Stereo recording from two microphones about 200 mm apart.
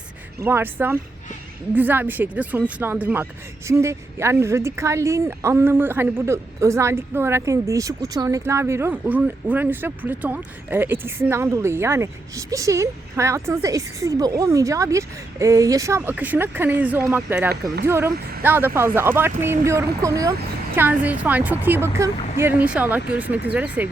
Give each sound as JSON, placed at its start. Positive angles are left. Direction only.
{"t": 0.3, "sound": "a woman's voice", "side_deg": -10}
{"t": 18.1, "sound": "speech", "side_deg": -50}
{"t": 18.4, "sound": "a woman's voice", "side_deg": -10}